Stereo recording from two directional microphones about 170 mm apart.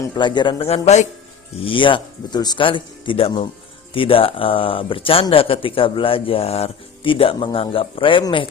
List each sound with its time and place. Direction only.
0.0 s speech: 25° left (ahead or behind)